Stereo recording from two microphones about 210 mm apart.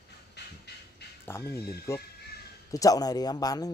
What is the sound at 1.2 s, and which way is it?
Speech, 10° left (ahead or behind).